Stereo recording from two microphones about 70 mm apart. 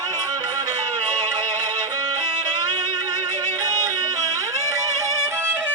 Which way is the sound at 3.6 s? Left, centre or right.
Right.